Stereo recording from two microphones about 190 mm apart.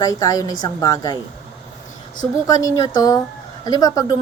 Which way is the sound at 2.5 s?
20° left (ahead or behind).